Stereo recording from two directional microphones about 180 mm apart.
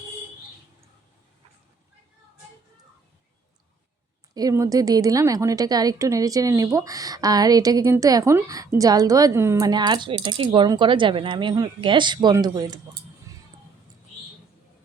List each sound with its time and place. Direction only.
4.4 s a woman's voice: 20° right (ahead or behind)